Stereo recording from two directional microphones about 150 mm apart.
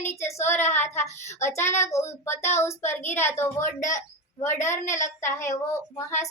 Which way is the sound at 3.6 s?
55° left (ahead or behind).